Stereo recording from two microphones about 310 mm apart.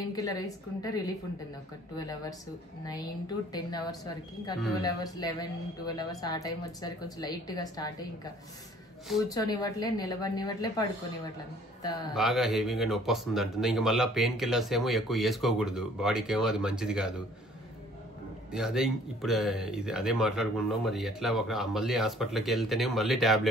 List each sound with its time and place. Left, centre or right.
0.1 s speech: centre
9.3 s speech: centre
12.1 s speech: centre
18.5 s speech: centre